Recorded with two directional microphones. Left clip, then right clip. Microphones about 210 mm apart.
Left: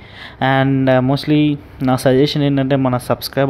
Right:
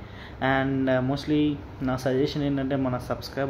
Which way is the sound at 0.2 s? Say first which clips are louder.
Left 9 dB; 45° left (ahead or behind).